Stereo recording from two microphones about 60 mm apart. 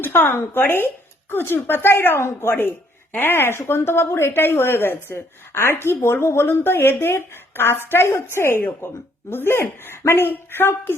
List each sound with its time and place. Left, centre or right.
0.0 s a woman's voice: left